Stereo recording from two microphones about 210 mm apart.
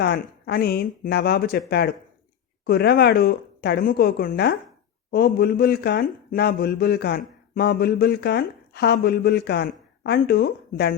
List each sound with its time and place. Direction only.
0.0 s speech: 50° left (ahead or behind)